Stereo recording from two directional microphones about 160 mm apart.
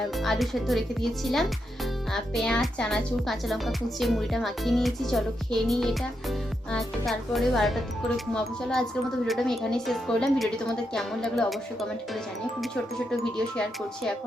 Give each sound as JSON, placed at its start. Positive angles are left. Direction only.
{"t": 0.2, "sound": "speech", "side_deg": 0}